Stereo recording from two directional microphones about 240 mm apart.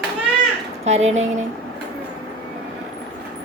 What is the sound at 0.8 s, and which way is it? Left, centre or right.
Speech, right.